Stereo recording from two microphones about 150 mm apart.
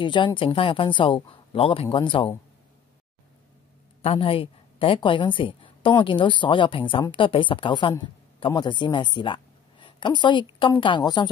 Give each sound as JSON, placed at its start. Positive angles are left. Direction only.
{"t": 0.0, "sound": "a woman's voice", "side_deg": 30}
{"t": 4.0, "sound": "a woman's voice", "side_deg": 40}